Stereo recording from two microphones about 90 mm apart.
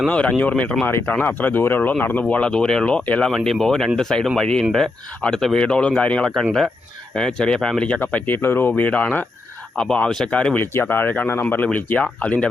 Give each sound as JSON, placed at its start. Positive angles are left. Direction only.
{"t": 0.1, "sound": "speech", "side_deg": 15}
{"t": 0.9, "sound": "speech", "side_deg": 25}
{"t": 8.0, "sound": "speech", "side_deg": 20}